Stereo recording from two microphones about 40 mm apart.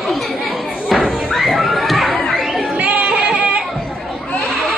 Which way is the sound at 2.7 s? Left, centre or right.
Right.